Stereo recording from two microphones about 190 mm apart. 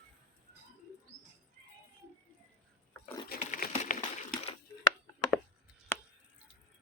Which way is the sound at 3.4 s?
40° left (ahead or behind).